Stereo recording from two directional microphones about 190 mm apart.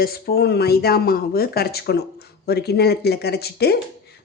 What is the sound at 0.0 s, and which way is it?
Speech, 55° left (ahead or behind).